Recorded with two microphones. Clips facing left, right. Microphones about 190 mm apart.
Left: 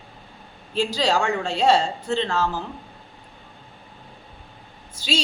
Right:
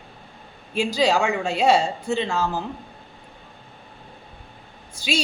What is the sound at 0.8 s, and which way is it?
A woman's voice, 10° right (ahead or behind).